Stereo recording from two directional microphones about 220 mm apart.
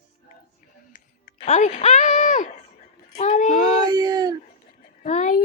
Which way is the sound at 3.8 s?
20° right (ahead or behind).